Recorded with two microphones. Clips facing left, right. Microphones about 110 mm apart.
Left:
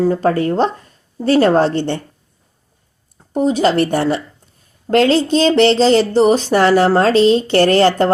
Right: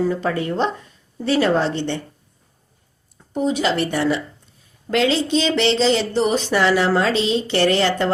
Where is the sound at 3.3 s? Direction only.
40° left (ahead or behind).